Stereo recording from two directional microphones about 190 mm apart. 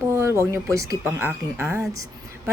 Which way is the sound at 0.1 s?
15° right (ahead or behind).